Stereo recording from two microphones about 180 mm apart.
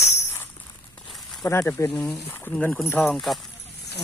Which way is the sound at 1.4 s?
15° left (ahead or behind).